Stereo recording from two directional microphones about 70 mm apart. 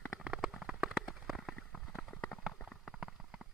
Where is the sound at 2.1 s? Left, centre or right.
Left.